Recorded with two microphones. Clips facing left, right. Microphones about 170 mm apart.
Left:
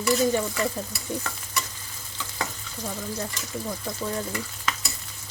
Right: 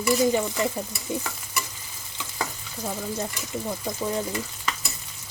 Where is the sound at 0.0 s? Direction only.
10° right (ahead or behind).